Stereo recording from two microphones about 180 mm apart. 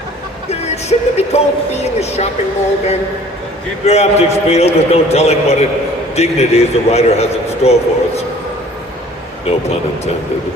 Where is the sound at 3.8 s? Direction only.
35° left (ahead or behind).